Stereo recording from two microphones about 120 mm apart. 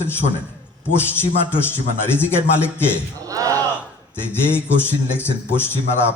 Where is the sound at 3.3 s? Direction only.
30° right (ahead or behind).